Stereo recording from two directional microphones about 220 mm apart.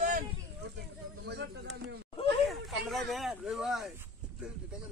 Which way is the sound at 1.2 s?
50° right (ahead or behind).